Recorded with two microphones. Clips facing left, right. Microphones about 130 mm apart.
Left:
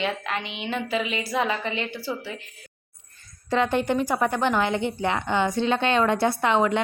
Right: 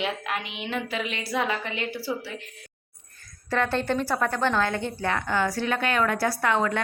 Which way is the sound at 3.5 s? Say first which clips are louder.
Left 3 dB; 15° left (ahead or behind).